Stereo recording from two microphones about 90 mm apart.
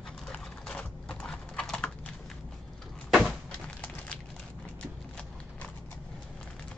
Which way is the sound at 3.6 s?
15° left (ahead or behind).